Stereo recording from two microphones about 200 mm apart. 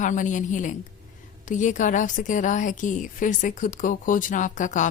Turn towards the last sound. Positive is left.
turn(degrees=40)  # may be behind; listen again after turning